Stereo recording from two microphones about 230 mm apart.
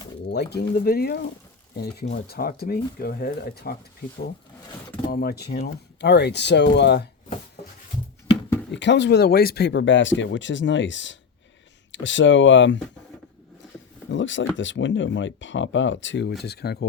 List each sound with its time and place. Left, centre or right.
0.3 s speech: left
5.0 s speech: left
8.7 s speech: left
14.1 s speech: left